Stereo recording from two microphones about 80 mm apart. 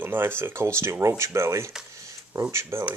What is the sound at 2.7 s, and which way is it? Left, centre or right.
Speech, right.